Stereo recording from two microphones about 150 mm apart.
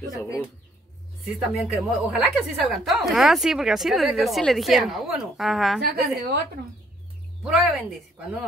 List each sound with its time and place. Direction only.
1.2 s a woman's voice: 5° right (ahead or behind)
5.9 s a woman's voice: 90° right
7.4 s a woman's voice: 5° right (ahead or behind)